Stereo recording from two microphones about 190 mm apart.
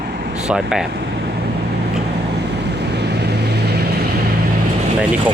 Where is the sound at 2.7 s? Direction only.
60° right (ahead or behind).